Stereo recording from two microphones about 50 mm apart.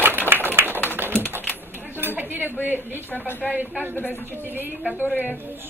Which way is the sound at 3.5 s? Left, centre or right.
Right.